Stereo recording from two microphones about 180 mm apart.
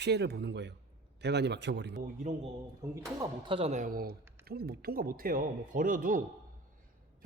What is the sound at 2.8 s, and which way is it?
A woman's voice, 20° right (ahead or behind).